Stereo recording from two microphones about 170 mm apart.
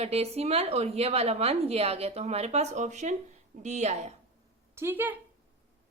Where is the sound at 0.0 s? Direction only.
35° right (ahead or behind).